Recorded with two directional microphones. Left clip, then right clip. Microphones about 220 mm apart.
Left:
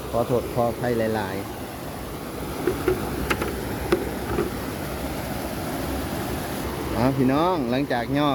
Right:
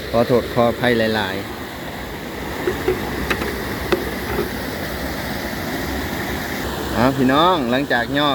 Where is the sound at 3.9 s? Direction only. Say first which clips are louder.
Right 3 dB; 30° left (ahead or behind).